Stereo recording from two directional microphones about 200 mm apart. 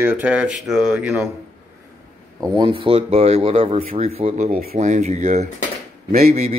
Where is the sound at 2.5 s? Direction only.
25° right (ahead or behind).